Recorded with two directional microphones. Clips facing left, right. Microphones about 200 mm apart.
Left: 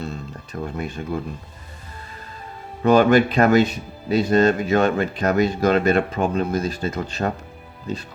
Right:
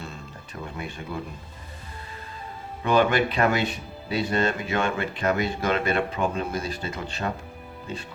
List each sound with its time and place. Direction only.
0.5 s speech: 50° left (ahead or behind)
2.8 s speech: 40° left (ahead or behind)